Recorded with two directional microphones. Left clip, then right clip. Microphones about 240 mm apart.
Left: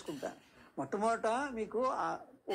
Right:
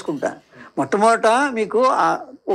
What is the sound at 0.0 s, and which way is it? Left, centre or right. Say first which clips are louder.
Speech: right 18 dB; right.